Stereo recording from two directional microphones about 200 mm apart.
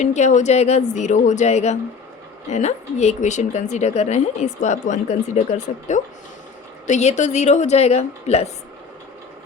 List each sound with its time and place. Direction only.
0.0 s a woman's voice: 35° left (ahead or behind)